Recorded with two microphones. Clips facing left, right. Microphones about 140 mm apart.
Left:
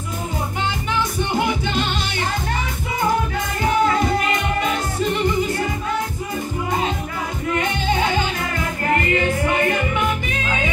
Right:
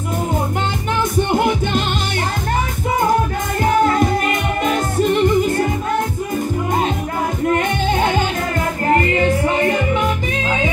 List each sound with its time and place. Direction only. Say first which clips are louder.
1.3 s music: right 3 dB; 50° right (ahead or behind)
4.3 s music: right 2 dB; 50° right (ahead or behind)
7.4 s music: right 3 dB; 50° right (ahead or behind)
9.5 s music: right 3 dB; 30° right (ahead or behind)